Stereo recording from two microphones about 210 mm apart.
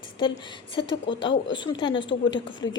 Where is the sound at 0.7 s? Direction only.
25° left (ahead or behind).